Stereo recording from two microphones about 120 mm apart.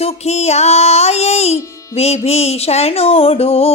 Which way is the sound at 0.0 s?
60° left (ahead or behind).